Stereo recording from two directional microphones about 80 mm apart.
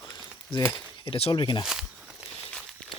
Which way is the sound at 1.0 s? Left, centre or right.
Left.